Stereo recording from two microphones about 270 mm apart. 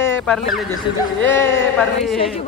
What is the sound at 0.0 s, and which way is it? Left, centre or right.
Speech, centre.